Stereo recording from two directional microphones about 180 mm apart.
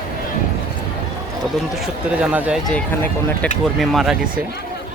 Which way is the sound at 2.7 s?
5° left (ahead or behind).